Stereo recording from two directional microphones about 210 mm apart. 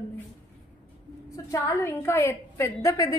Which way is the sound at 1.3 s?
15° left (ahead or behind).